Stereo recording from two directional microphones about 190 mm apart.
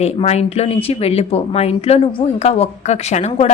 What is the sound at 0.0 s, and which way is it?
Speech, 35° left (ahead or behind).